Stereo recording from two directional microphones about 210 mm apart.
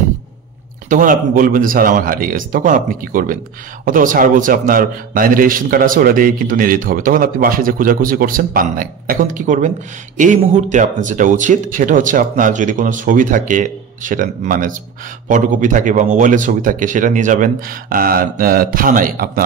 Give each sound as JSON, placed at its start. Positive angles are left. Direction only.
{"t": 0.8, "sound": "a man's voice", "side_deg": -40}